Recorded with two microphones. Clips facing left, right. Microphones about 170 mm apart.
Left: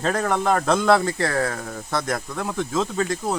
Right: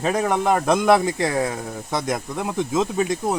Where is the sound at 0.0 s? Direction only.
15° right (ahead or behind).